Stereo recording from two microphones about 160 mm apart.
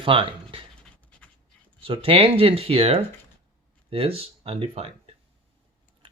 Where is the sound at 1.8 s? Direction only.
35° right (ahead or behind).